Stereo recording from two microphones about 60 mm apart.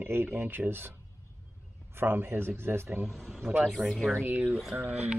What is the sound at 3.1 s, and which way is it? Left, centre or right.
Speech, centre.